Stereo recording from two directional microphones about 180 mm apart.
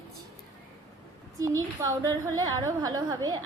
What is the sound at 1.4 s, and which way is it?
A woman's voice, 20° right (ahead or behind).